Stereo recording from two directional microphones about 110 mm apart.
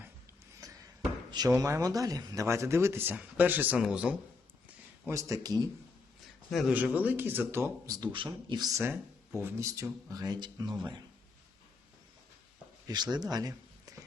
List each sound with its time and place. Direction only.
0.6 s a sound: 30° right (ahead or behind)
1.3 s speech: 35° right (ahead or behind); by 4.2 s 10° right (ahead or behind)
5.1 s a man's voice: 35° right (ahead or behind)
6.5 s speech: centre (ahead or behind)
6.7 s speech: 15° right (ahead or behind)
7.9 s a man's voice: 45° right (ahead or behind)
8.7 s speech: 25° right (ahead or behind); by 10.8 s 40° right (ahead or behind)
12.9 s a man's voice: 40° right (ahead or behind)
13.3 s a sound: 35° right (ahead or behind)